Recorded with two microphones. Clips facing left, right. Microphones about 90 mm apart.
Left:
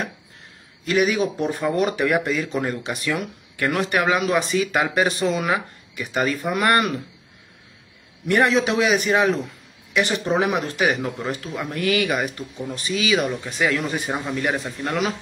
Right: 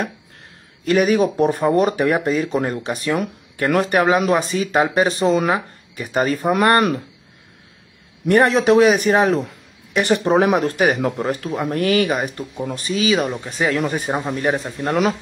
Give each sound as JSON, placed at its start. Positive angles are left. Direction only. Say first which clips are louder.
{"t": 0.8, "sound": "speech", "louder": "right 4 dB", "side_deg": -45}
{"t": 8.3, "sound": "speech", "louder": "right 5 dB", "side_deg": -40}